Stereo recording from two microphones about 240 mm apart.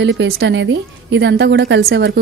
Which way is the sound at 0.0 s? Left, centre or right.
Right.